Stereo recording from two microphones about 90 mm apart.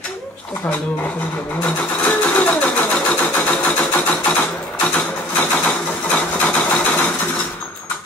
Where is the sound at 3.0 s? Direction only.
15° left (ahead or behind).